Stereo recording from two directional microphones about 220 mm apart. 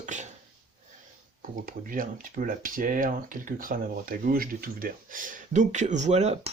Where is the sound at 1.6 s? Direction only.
40° right (ahead or behind).